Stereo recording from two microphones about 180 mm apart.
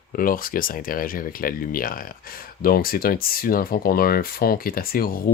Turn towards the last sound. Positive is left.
turn(degrees=55)  # may be behind; listen again after turning